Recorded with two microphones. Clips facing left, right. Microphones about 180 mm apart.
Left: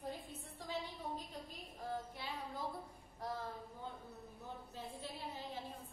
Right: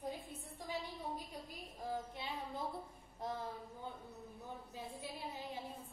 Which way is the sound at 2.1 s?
20° right (ahead or behind).